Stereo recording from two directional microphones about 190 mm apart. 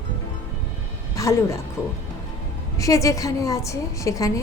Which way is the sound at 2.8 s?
15° left (ahead or behind).